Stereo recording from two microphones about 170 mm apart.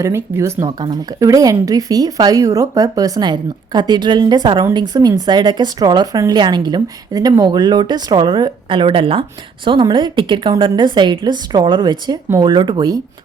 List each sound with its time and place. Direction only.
0.0 s speech: 15° right (ahead or behind)